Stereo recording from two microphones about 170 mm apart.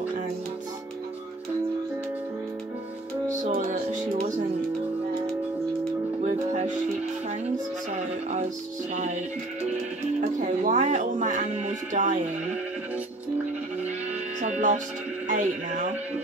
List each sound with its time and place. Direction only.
3.4 s music: 45° right (ahead or behind)
6.2 s music: 40° right (ahead or behind)
8.9 s music: 45° right (ahead or behind)
10.2 s music: 45° right (ahead or behind)
14.4 s music: 45° right (ahead or behind)
15.2 s speech: 45° right (ahead or behind)